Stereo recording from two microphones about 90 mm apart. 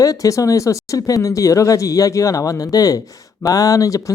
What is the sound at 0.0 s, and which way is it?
Speech, 40° left (ahead or behind).